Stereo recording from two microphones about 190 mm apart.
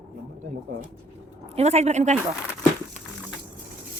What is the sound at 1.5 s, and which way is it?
Speech, 35° right (ahead or behind).